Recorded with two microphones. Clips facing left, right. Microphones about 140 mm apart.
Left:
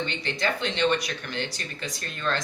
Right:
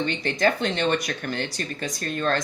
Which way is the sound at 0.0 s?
45° right (ahead or behind).